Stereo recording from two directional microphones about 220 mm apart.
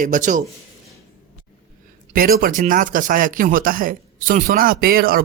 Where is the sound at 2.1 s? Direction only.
40° right (ahead or behind).